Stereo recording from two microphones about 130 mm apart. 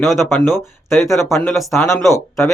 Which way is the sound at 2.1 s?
25° left (ahead or behind).